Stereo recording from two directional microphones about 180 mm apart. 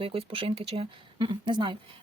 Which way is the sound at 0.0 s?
30° right (ahead or behind).